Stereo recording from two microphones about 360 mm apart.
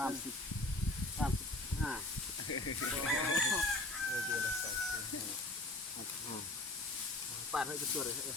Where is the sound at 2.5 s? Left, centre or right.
Left.